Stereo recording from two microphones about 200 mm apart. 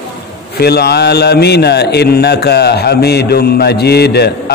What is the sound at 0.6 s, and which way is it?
Speech, 55° left (ahead or behind).